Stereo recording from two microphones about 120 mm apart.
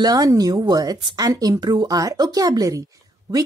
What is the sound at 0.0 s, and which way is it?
A woman's voice, 30° right (ahead or behind).